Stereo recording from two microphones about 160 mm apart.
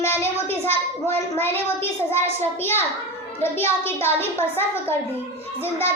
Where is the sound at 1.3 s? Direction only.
15° left (ahead or behind).